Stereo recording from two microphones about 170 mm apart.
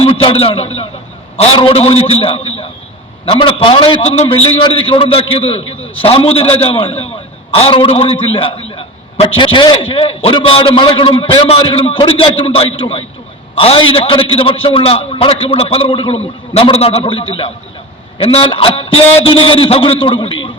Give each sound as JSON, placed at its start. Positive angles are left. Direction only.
{"t": 0.0, "sound": "a man's voice", "side_deg": 35}